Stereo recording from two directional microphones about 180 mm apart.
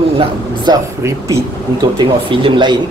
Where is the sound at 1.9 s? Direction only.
25° right (ahead or behind).